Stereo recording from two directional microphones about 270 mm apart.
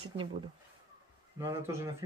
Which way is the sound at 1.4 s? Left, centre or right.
Centre.